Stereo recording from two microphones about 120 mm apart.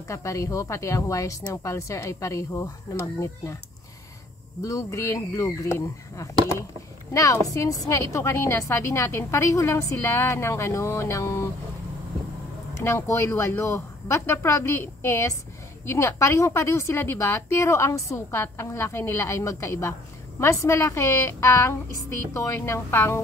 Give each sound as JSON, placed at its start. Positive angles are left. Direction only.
{"t": 0.1, "sound": "a woman's voice", "side_deg": 25}
{"t": 4.6, "sound": "a woman's voice", "side_deg": 25}
{"t": 12.8, "sound": "a woman's voice", "side_deg": 25}